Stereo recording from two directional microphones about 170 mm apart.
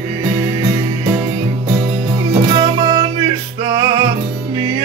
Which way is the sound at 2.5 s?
20° right (ahead or behind).